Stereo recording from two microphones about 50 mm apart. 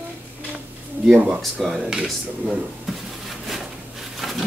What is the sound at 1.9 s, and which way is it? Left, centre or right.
Speech, centre.